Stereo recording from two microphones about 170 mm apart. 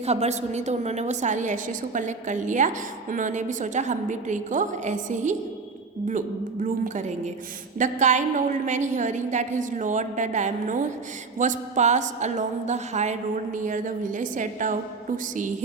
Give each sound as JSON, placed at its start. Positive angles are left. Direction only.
{"t": 0.0, "sound": "a woman's voice", "side_deg": -40}
{"t": 6.8, "sound": "a woman's voice", "side_deg": -45}